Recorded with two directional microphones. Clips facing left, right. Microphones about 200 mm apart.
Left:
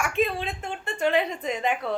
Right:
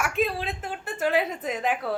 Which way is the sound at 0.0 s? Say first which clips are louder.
Left 1 dB; centre (ahead or behind).